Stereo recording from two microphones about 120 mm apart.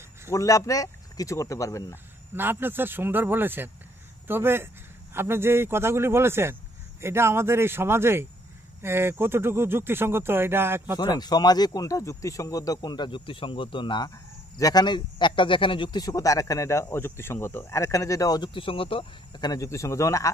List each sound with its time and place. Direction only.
0.3 s a man's voice: 25° left (ahead or behind)
2.3 s speech: 15° right (ahead or behind)
11.0 s a man's voice: 35° left (ahead or behind)
19.3 s a man's voice: 35° left (ahead or behind)